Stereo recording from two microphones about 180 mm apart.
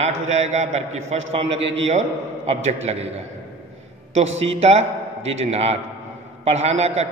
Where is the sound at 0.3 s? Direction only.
40° right (ahead or behind).